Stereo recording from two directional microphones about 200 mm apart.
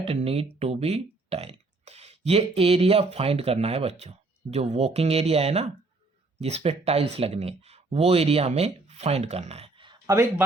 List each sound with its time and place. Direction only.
0.0 s speech: 30° right (ahead or behind); by 10.4 s 15° right (ahead or behind)